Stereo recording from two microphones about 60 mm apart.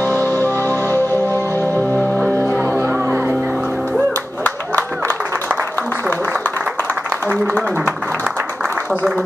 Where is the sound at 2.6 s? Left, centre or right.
Right.